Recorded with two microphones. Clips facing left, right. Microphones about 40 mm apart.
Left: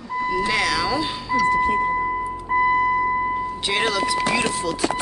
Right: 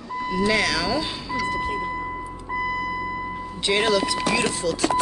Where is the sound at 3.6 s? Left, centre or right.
Centre.